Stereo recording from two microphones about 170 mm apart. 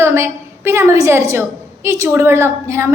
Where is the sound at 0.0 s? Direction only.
15° right (ahead or behind).